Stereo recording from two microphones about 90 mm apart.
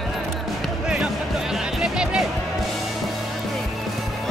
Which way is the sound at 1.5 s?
5° right (ahead or behind).